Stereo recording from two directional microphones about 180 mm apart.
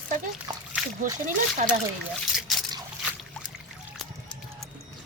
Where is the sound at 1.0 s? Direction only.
45° right (ahead or behind).